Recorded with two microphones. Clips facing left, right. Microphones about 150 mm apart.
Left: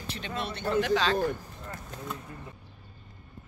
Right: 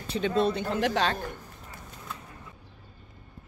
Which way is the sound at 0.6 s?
85° right.